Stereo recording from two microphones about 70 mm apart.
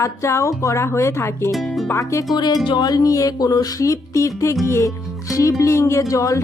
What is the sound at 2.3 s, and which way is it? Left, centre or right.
Speech, left.